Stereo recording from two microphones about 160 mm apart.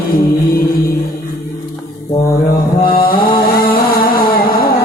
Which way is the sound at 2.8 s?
65° left (ahead or behind).